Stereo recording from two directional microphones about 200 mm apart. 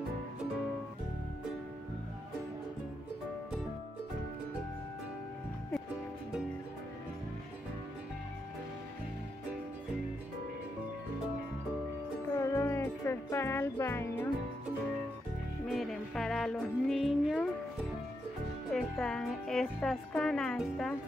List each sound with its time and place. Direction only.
12.4 s music: 15° left (ahead or behind)
15.6 s music: centre (ahead or behind)
18.7 s speech: centre (ahead or behind)